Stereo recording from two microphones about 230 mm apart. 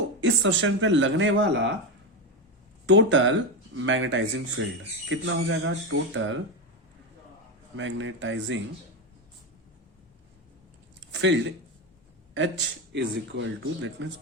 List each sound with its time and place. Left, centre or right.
0.2 s speech: right
2.8 s speech: right
7.8 s speech: right
11.0 s speech: right